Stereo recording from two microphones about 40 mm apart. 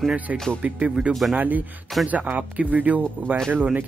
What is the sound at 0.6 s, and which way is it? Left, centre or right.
Speech, right.